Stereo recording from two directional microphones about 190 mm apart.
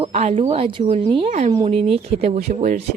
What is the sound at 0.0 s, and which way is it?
Speech, 35° right (ahead or behind).